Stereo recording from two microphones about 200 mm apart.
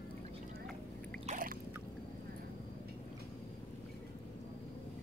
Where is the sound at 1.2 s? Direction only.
45° right (ahead or behind).